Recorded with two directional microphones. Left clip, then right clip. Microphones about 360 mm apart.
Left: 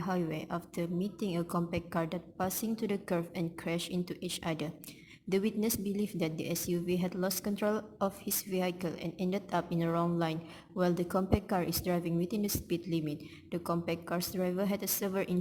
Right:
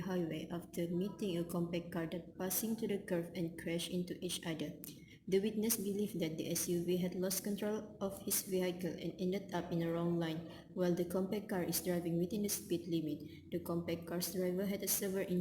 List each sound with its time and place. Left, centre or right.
0.0 s a woman's voice: left